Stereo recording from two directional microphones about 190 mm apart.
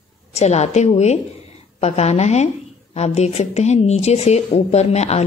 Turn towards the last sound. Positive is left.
turn(degrees=35)  # may be behind; listen again after turning